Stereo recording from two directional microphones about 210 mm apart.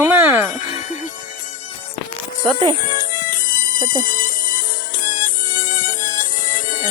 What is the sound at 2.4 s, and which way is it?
Speech, 20° right (ahead or behind).